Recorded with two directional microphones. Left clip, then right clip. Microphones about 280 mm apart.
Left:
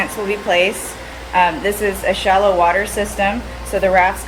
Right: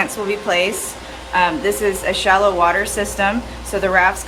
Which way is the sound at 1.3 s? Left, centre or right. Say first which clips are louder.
Left 1 dB; centre.